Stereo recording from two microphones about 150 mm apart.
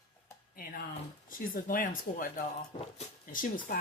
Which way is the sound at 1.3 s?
70° left (ahead or behind).